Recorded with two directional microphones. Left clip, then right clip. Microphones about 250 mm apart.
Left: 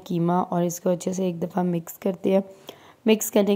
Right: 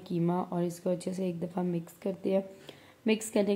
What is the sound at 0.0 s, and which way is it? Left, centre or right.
A woman's voice, left.